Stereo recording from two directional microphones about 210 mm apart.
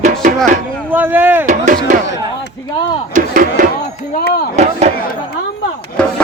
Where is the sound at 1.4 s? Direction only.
40° right (ahead or behind).